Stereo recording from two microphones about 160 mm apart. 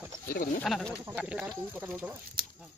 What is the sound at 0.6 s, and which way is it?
Speech, 5° left (ahead or behind).